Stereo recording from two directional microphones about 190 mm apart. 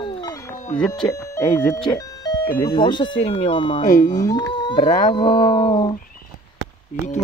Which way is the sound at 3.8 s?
45° left (ahead or behind).